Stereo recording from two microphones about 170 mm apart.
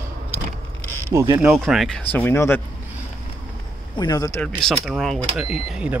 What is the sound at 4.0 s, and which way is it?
Speech, 20° left (ahead or behind).